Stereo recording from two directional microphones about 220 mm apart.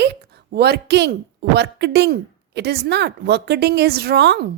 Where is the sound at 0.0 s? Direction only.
50° right (ahead or behind).